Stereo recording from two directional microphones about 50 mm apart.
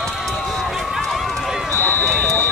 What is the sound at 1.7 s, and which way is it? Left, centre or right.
Run, left.